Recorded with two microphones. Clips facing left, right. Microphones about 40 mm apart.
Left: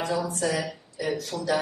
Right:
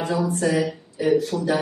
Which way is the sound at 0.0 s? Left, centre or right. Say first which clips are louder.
Right 4 dB; right.